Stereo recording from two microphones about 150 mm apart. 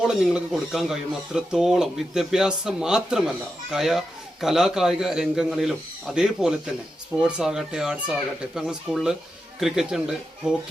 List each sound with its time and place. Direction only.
0.0 s speech: 5° right (ahead or behind)